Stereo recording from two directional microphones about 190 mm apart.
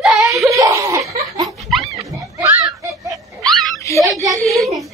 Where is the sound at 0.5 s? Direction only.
15° right (ahead or behind).